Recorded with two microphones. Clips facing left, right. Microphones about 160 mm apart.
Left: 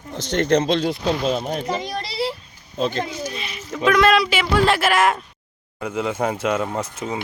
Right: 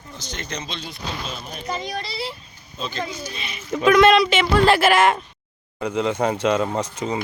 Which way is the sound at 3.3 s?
Centre (ahead or behind).